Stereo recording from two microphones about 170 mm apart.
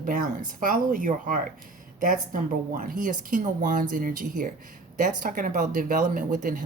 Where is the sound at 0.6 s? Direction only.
55° right (ahead or behind).